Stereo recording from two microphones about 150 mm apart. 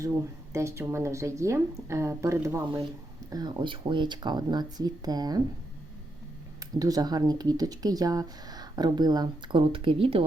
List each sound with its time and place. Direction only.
0.5 s speech: 20° right (ahead or behind)
6.6 s speech: 25° right (ahead or behind)